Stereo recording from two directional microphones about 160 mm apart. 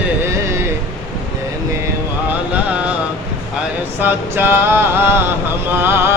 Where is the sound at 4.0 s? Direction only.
15° right (ahead or behind).